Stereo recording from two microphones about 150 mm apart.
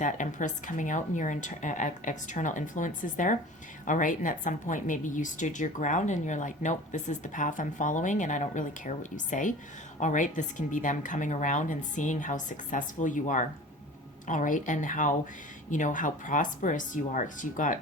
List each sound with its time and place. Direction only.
0.0 s a woman's voice: 60° left (ahead or behind)